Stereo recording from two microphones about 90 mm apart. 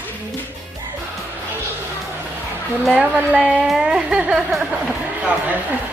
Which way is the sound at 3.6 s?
5° right (ahead or behind).